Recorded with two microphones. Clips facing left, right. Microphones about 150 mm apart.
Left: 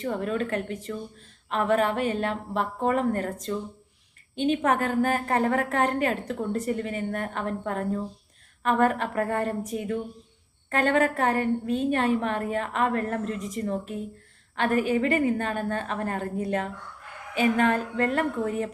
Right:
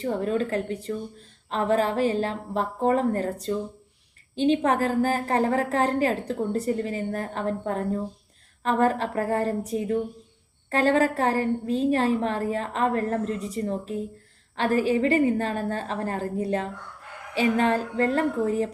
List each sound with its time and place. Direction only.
0.0 s a woman's voice: 30° right (ahead or behind)